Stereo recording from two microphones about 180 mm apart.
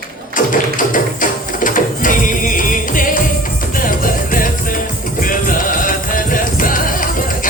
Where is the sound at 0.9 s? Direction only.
45° left (ahead or behind).